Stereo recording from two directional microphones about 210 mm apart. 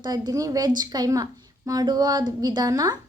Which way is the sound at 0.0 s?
20° right (ahead or behind).